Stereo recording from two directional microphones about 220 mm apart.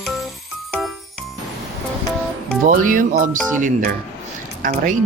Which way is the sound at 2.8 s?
35° right (ahead or behind).